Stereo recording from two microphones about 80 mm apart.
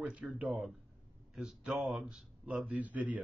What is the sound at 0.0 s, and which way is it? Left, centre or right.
Speech, centre.